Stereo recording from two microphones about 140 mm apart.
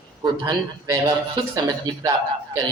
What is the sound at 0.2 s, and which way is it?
Speech, 25° right (ahead or behind).